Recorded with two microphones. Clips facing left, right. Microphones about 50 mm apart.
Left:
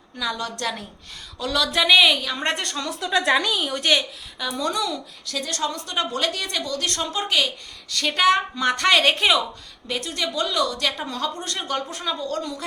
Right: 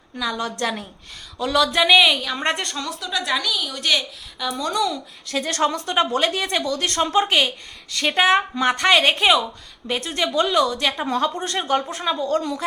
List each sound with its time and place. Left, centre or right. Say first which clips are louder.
0.6 s a woman's voice: right 3 dB; centre
3.0 s a woman's voice: left 5 dB; left
4.4 s a woman's voice: right 2 dB; centre
5.2 s a woman's voice: right 6 dB; right; by 9.4 s centre
9.8 s speech: right 3 dB; right
10.8 s a woman's voice: right 5 dB; centre